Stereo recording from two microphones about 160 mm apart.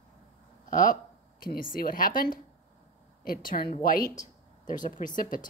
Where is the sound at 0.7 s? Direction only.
55° left (ahead or behind).